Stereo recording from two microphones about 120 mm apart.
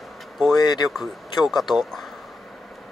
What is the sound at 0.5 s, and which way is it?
Speech, 35° left (ahead or behind).